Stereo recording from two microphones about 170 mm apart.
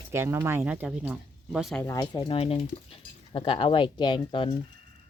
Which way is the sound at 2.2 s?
30° left (ahead or behind).